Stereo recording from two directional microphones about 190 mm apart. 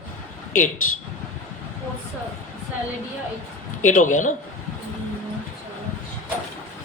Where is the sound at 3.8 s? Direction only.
40° left (ahead or behind).